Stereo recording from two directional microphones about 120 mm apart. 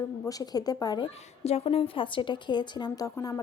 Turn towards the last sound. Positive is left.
turn(degrees=30)  # may be behind; listen again after turning